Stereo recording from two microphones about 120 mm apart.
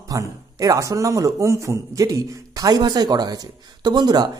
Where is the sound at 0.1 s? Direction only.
30° right (ahead or behind).